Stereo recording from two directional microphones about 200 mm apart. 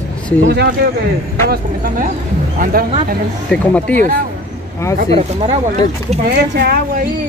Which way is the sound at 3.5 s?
5° left (ahead or behind).